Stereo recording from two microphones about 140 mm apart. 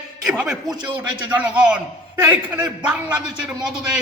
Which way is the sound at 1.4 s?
10° right (ahead or behind).